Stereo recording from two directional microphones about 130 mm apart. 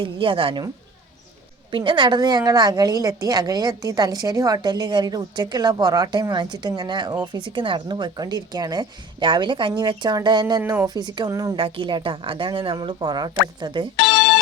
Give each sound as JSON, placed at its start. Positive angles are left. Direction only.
{"t": 0.0, "sound": "speech", "side_deg": -40}
{"t": 1.7, "sound": "a woman's voice", "side_deg": -40}
{"t": 10.6, "sound": "a woman's voice", "side_deg": -20}
{"t": 11.5, "sound": "a woman's voice", "side_deg": -40}
{"t": 13.9, "sound": "music", "side_deg": 0}